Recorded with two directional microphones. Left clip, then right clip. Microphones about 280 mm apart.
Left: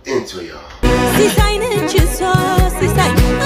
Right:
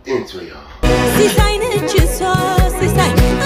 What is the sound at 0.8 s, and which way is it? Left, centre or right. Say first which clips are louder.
Music: even; centre.